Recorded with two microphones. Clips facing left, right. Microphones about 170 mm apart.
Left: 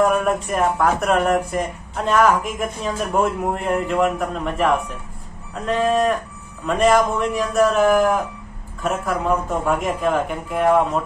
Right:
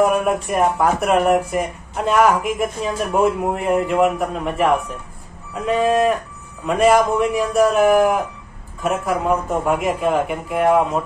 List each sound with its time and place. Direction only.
0.0 s a man's voice: 5° right (ahead or behind)